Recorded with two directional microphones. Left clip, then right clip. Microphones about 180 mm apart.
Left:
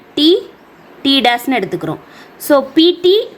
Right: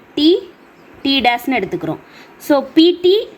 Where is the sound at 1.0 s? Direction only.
Centre (ahead or behind).